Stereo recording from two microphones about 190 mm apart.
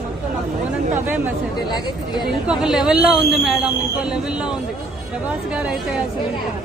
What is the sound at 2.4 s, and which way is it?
Speech, 5° right (ahead or behind).